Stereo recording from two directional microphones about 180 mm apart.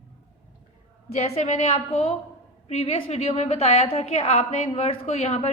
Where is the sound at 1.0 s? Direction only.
35° left (ahead or behind).